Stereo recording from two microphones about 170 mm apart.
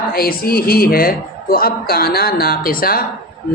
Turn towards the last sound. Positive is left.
turn(degrees=60)  # may be behind; listen again after turning